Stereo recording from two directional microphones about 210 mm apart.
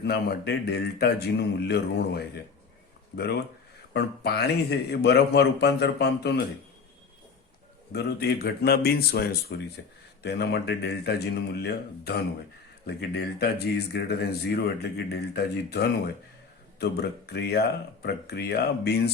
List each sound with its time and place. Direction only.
0.0 s speech: 50° left (ahead or behind)
3.9 s speech: 50° left (ahead or behind)
7.9 s speech: 50° left (ahead or behind)